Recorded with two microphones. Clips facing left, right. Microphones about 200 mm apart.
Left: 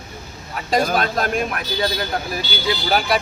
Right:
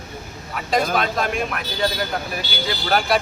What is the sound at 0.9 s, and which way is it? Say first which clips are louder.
Speech: left 2 dB; 40° left (ahead or behind).